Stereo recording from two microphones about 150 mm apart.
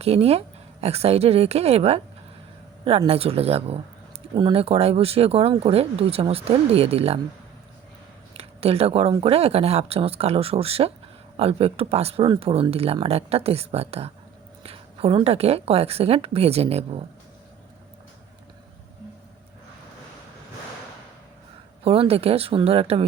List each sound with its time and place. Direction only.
0.0 s a woman's voice: 45° right (ahead or behind)
3.1 s speech: 40° right (ahead or behind)
8.3 s a woman's voice: 40° right (ahead or behind)
21.8 s speech: 40° right (ahead or behind)